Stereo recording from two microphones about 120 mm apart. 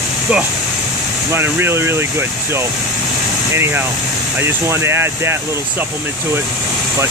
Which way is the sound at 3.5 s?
20° right (ahead or behind).